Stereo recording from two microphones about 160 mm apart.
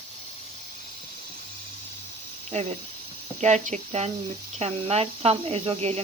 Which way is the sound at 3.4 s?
45° right (ahead or behind).